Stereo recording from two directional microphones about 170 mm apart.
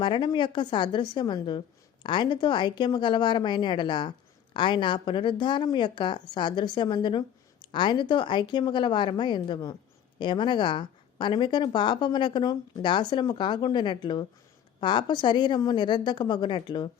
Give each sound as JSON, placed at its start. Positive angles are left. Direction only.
{"t": 0.0, "sound": "a woman's voice", "side_deg": 30}